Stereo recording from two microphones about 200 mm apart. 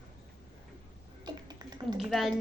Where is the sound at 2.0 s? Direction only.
Centre (ahead or behind).